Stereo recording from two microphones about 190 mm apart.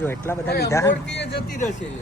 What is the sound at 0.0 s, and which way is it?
Speech, 10° left (ahead or behind).